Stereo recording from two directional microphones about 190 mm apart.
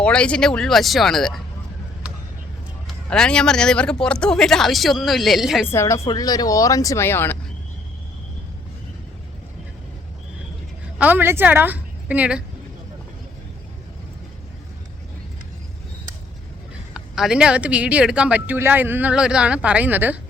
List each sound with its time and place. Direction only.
0.0 s speech: 5° left (ahead or behind)
2.8 s speech: 5° left (ahead or behind)
5.6 s speech: 15° left (ahead or behind)
10.9 s a woman's voice: 10° right (ahead or behind)
16.9 s speech: 5° right (ahead or behind)